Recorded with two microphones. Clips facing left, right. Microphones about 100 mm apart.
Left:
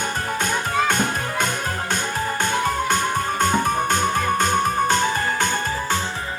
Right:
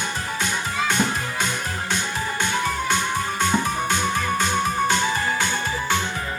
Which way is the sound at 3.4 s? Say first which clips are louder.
Left 3 dB; 45° left (ahead or behind).